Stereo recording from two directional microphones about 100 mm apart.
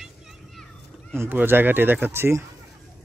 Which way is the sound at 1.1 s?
20° right (ahead or behind).